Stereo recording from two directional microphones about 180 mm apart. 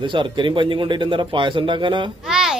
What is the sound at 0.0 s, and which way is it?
Speech, 25° right (ahead or behind).